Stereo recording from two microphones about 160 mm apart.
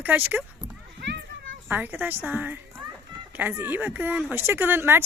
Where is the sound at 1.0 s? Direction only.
90° right.